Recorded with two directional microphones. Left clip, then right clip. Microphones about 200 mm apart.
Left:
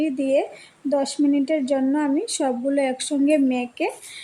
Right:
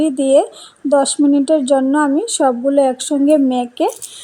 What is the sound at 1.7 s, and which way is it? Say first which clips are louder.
Speech: right 8 dB; 10° left (ahead or behind).